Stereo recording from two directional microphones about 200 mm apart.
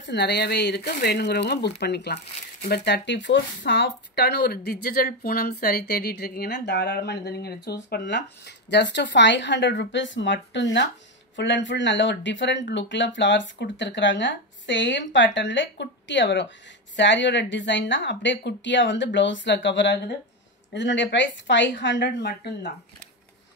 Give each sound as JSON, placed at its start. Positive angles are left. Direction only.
{"t": 0.0, "sound": "speech", "side_deg": 55}